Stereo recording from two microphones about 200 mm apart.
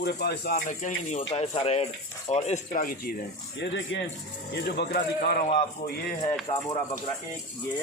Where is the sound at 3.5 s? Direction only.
60° left (ahead or behind).